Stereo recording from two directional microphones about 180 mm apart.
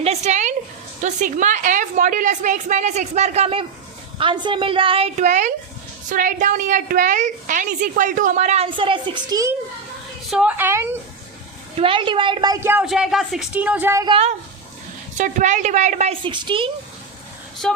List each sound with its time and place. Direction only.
0.0 s a woman's voice: 40° right (ahead or behind); by 9.6 s 20° right (ahead or behind)
10.2 s a woman's voice: 5° right (ahead or behind)
11.8 s a woman's voice: 30° right (ahead or behind)
14.1 s a woman's voice: 35° right (ahead or behind)
16.2 s a woman's voice: 25° right (ahead or behind)
17.6 s speech: centre (ahead or behind)